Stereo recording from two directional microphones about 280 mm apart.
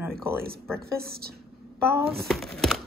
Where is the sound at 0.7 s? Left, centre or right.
Right.